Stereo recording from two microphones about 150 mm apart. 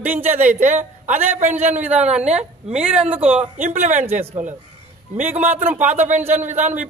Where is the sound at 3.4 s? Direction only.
55° right (ahead or behind).